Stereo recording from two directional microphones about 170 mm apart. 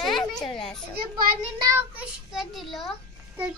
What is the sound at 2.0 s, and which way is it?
Speech, centre (ahead or behind).